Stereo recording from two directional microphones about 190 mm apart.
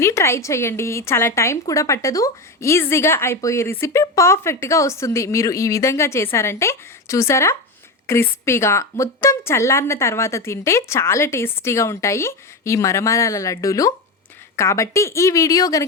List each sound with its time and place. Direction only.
0.0 s speech: 15° left (ahead or behind)